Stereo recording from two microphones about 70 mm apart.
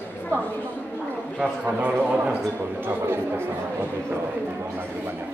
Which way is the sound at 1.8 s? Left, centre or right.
Centre.